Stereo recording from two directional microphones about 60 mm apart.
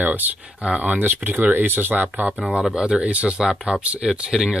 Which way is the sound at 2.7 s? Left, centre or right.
Centre.